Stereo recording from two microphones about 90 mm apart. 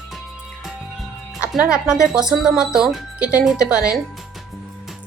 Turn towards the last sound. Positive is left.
turn(degrees=-10)  # may be behind; listen again after turning